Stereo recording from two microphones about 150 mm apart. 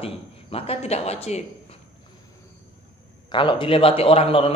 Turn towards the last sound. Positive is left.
turn(degrees=40)  # may be behind; listen again after turning